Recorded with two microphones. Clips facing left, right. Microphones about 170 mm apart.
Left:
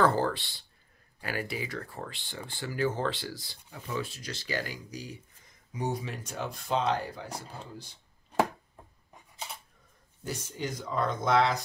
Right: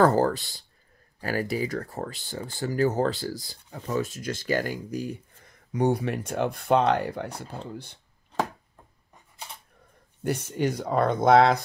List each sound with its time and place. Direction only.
0.0 s speech: 40° right (ahead or behind); by 8.0 s 60° right (ahead or behind)
10.2 s speech: 65° right (ahead or behind)